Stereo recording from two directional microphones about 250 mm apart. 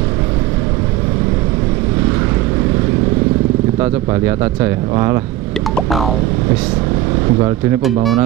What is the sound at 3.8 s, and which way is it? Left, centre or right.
Speech, centre.